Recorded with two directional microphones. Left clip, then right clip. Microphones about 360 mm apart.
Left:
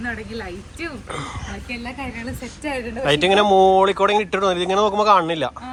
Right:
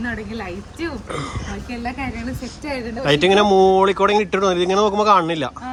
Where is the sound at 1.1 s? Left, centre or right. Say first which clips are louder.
Right 2 dB; centre.